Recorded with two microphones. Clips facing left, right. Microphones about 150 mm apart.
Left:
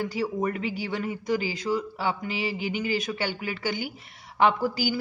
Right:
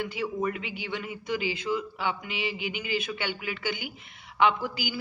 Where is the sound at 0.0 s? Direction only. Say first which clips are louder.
Left 2 dB; 35° left (ahead or behind).